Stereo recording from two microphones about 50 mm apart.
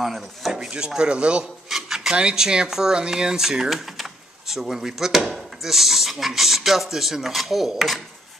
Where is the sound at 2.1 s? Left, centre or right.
Centre.